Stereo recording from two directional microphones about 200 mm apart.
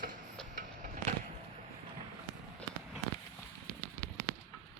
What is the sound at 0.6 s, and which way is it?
Vehicle, 40° right (ahead or behind).